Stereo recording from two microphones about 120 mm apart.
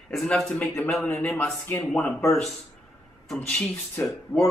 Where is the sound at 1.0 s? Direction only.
15° left (ahead or behind).